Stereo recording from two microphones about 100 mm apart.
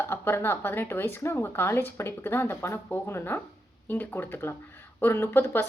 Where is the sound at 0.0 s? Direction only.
25° left (ahead or behind).